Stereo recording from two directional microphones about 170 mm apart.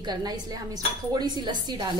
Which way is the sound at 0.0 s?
25° right (ahead or behind).